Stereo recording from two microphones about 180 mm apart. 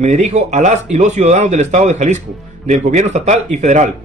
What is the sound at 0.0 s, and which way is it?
Speech, 40° right (ahead or behind).